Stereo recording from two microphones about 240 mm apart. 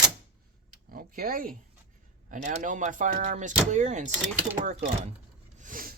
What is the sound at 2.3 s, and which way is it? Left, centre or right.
Speech, right.